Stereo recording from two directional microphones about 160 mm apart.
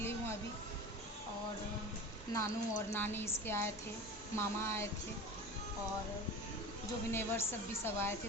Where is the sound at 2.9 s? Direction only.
15° left (ahead or behind).